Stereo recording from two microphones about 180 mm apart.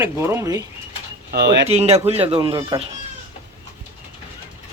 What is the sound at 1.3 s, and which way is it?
Speech, 65° right (ahead or behind).